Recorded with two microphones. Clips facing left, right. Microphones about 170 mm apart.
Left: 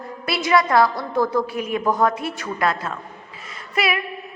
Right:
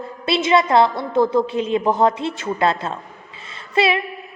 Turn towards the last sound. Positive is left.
turn(degrees=-25)  # may be behind; listen again after turning